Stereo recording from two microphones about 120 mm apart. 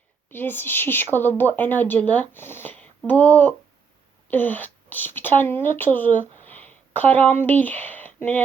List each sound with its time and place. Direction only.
0.3 s speech: 15° left (ahead or behind)